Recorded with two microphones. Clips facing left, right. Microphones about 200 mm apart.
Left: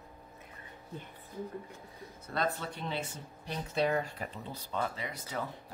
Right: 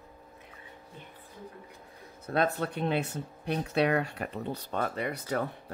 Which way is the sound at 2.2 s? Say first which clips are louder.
Right 6 dB; 60° right (ahead or behind).